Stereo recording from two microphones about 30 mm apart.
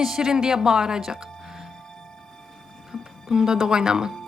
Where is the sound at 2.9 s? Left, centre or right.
Right.